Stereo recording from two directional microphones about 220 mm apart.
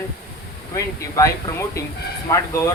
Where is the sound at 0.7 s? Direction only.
15° left (ahead or behind).